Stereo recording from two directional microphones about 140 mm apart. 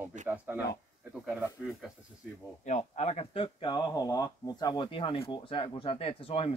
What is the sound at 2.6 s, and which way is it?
Speech, 55° left (ahead or behind).